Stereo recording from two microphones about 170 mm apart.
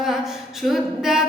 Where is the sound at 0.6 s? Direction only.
Centre (ahead or behind).